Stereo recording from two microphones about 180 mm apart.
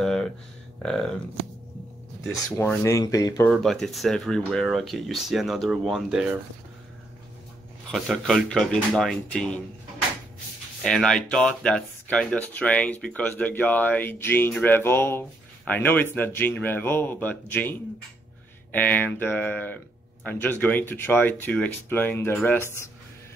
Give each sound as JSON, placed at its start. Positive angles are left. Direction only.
{"t": 0.0, "sound": "a sound", "side_deg": 5}
{"t": 0.8, "sound": "speech", "side_deg": 0}
{"t": 2.2, "sound": "speech", "side_deg": 10}
{"t": 3.4, "sound": "speech", "side_deg": 0}
{"t": 7.9, "sound": "speech", "side_deg": 0}
{"t": 10.8, "sound": "speech", "side_deg": 0}